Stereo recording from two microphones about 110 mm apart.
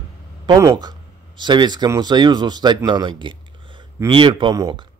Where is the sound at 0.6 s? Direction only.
35° right (ahead or behind).